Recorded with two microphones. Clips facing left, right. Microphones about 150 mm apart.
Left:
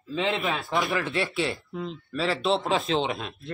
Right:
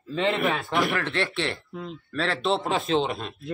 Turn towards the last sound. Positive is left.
turn(degrees=0)  # may be behind; listen again after turning